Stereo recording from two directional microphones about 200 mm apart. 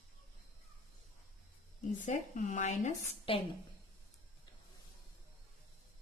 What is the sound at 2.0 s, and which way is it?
A woman's voice, 40° left (ahead or behind).